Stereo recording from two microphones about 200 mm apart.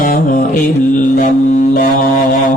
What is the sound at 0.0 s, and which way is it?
Music, 45° left (ahead or behind).